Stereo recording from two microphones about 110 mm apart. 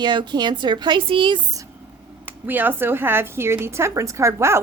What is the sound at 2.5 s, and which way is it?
A woman's voice, 15° right (ahead or behind).